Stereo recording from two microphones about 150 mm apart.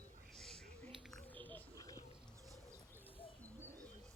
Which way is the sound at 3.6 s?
20° right (ahead or behind).